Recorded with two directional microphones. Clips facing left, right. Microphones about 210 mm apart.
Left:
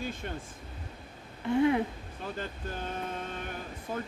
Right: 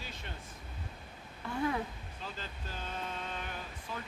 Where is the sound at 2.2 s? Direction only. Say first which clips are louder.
Left 8 dB; 55° left (ahead or behind).